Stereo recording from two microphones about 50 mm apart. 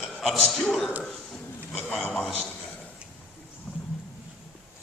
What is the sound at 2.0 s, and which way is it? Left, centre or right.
Speech, left.